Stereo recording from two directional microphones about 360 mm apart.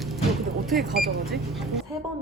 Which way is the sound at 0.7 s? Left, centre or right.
Centre.